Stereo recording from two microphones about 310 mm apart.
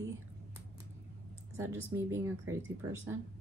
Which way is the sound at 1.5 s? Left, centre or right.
Centre.